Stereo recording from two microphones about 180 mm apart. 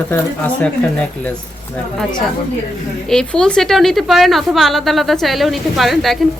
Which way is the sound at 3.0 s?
5° left (ahead or behind).